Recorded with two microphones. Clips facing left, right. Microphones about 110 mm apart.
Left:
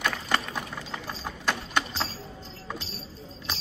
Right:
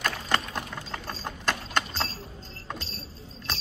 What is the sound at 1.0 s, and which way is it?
Mechanisms, 10° left (ahead or behind).